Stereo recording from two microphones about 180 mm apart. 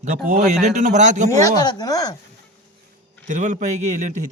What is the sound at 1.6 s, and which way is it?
Speech, 25° left (ahead or behind).